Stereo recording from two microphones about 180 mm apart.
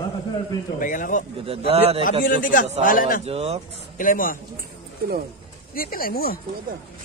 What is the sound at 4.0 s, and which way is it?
Speech, 50° left (ahead or behind).